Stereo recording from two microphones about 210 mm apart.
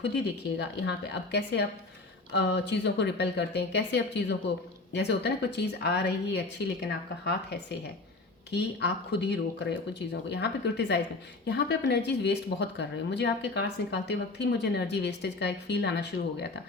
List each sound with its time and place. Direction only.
0.8 s speech: 55° left (ahead or behind)